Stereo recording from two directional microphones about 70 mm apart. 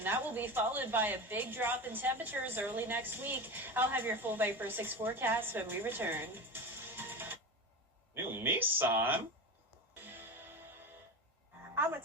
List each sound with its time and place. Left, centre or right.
0.0 s a woman's voice: right
9.9 s music: right